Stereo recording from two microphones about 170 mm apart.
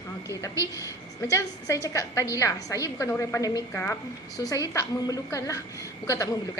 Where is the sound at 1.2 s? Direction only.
15° left (ahead or behind).